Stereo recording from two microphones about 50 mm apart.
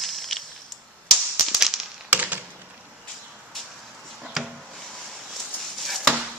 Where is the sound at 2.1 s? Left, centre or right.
Right.